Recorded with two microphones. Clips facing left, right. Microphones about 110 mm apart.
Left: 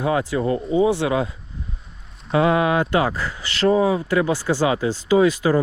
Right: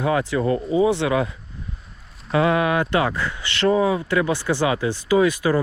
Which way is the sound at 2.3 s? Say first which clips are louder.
Left 1 dB; 25° left (ahead or behind).